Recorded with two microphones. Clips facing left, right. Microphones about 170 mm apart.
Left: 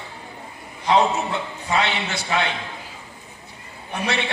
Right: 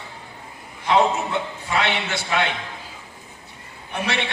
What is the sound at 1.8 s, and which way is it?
Speech, 60° right (ahead or behind).